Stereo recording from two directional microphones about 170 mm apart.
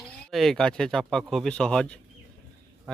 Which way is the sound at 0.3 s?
Centre (ahead or behind).